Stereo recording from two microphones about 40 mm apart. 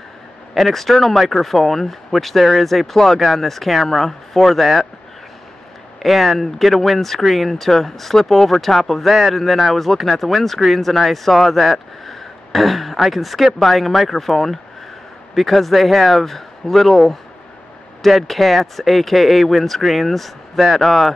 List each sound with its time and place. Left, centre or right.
0.6 s speech: centre
6.0 s speech: centre